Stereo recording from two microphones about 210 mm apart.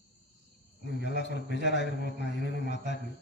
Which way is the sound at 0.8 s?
55° left (ahead or behind).